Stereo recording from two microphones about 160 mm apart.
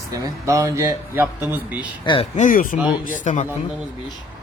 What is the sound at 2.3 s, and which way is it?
Speech, 55° left (ahead or behind).